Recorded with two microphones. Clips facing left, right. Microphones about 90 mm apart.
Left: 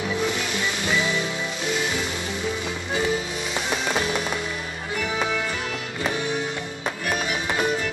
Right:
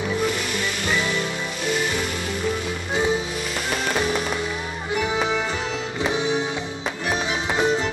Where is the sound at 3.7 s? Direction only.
Centre (ahead or behind).